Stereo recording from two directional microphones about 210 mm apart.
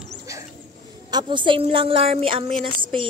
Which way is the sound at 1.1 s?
20° right (ahead or behind).